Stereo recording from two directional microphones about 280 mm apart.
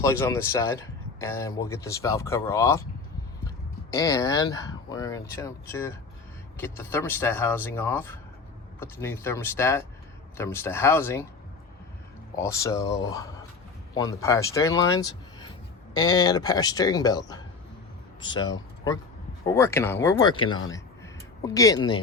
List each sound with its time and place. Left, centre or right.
0.0 s speech: centre
3.9 s speech: centre
12.4 s speech: centre
13.9 s speech: centre